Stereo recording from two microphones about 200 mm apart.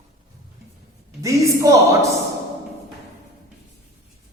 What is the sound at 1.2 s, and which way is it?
Speech, 15° right (ahead or behind).